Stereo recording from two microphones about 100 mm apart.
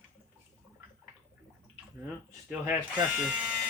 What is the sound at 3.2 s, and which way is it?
Speech, 10° right (ahead or behind).